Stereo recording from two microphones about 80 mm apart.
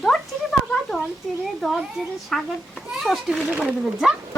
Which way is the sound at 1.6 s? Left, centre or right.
Centre.